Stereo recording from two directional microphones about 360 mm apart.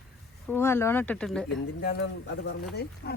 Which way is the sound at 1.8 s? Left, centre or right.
Left.